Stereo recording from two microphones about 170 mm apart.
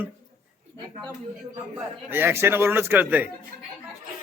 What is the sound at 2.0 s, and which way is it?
A man's voice, 10° right (ahead or behind).